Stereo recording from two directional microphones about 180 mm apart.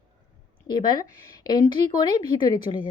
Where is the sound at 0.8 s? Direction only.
20° left (ahead or behind).